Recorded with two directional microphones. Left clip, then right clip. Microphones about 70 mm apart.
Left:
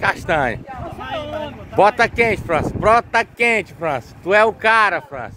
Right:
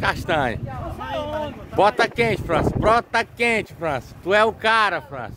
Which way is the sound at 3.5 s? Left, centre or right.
Right.